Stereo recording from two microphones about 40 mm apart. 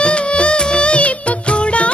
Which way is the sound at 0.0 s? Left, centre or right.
Left.